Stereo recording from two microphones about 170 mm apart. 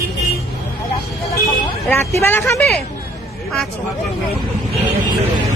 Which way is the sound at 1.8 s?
15° left (ahead or behind).